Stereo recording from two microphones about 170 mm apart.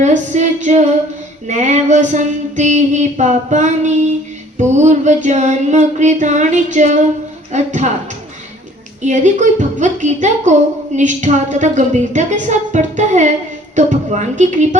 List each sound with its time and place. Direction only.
0.0 s female singing: 45° right (ahead or behind)
9.0 s female singing: 45° right (ahead or behind)